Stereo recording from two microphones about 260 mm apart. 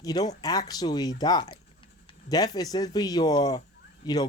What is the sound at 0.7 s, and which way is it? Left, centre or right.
A man's voice, centre.